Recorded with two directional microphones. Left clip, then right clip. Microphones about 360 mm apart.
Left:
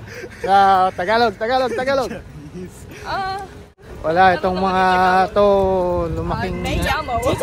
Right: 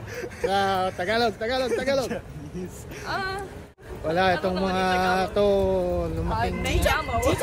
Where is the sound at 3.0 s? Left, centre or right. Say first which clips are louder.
Left 6 dB; centre.